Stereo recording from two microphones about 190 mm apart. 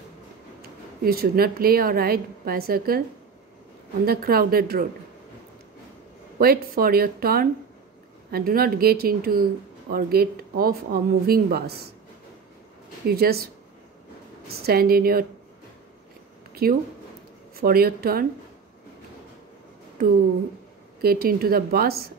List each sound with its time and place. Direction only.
0.6 s speech: 55° right (ahead or behind)
4.0 s speech: 50° right (ahead or behind)
6.4 s speech: 50° right (ahead or behind)
13.1 s speech: 55° right (ahead or behind)
14.6 s speech: 55° right (ahead or behind)
16.6 s speech: 50° right (ahead or behind)
21.0 s speech: 55° right (ahead or behind)